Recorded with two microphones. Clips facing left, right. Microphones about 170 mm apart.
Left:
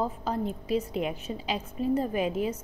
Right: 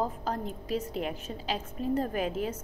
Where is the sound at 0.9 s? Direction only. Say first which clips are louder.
Left 3 dB; 40° right (ahead or behind).